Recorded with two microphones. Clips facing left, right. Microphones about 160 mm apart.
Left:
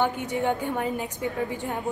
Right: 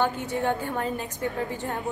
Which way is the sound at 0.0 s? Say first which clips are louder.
Left 1 dB; 15° left (ahead or behind).